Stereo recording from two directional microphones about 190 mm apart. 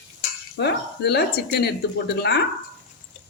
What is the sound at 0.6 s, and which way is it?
Speech, 60° left (ahead or behind).